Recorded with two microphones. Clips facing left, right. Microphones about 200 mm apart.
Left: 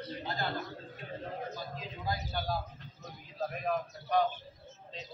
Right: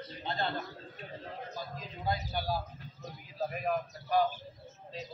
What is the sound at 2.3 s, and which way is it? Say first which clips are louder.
A man's voice: right 1 dB; 10° right (ahead or behind).